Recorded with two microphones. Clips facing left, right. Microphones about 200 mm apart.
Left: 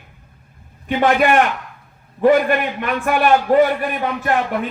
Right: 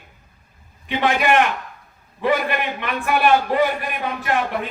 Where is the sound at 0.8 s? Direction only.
45° left (ahead or behind).